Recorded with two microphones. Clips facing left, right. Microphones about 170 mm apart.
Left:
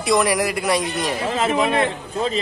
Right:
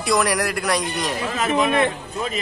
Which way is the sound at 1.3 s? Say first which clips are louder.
Left 1 dB; 25° left (ahead or behind).